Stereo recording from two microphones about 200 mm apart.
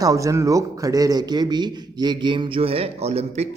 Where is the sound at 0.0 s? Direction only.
15° right (ahead or behind).